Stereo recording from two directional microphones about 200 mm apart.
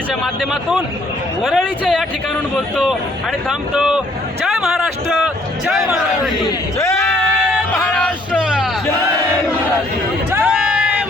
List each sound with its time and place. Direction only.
0.1 s a man's voice: 5° right (ahead or behind)
3.8 s a man's voice: 5° right (ahead or behind)
7.5 s music: centre (ahead or behind)
10.3 s a sound: 5° right (ahead or behind)